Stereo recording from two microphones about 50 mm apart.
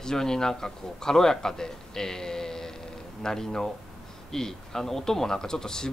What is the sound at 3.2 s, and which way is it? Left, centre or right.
Speech, centre.